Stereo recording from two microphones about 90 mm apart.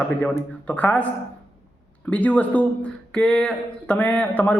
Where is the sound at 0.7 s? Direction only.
15° left (ahead or behind).